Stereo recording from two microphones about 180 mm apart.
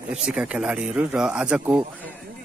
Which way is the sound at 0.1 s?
5° right (ahead or behind).